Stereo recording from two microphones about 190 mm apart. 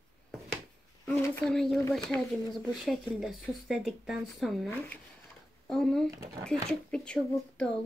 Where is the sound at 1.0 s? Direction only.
5° left (ahead or behind).